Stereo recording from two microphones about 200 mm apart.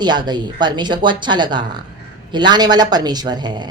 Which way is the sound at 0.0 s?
20° right (ahead or behind).